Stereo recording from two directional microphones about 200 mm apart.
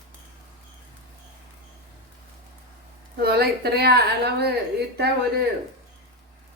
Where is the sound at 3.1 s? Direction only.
50° right (ahead or behind).